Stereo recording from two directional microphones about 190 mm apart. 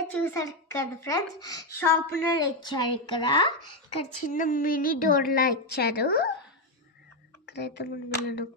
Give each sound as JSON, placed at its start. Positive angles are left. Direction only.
{"t": 0.1, "sound": "a woman's voice", "side_deg": 10}
{"t": 4.3, "sound": "a woman's voice", "side_deg": 45}
{"t": 7.4, "sound": "speech", "side_deg": 60}